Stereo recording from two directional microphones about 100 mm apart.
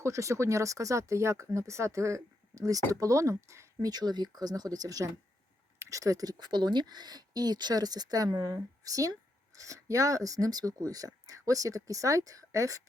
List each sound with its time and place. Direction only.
0.0 s speech: 30° right (ahead or behind)
3.9 s speech: 45° right (ahead or behind)